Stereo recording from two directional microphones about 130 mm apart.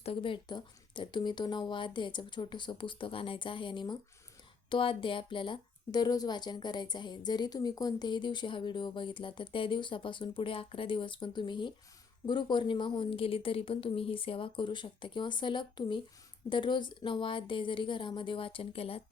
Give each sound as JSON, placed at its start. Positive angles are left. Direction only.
{"t": 0.0, "sound": "speech", "side_deg": 45}